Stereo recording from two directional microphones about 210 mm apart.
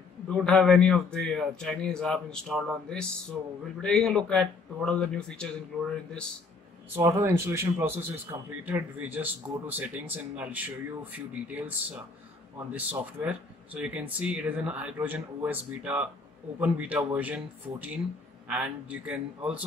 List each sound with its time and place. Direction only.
0.3 s a man's voice: centre (ahead or behind)
7.0 s a man's voice: 15° right (ahead or behind)